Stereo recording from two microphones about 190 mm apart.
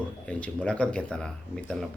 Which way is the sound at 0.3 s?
5° left (ahead or behind).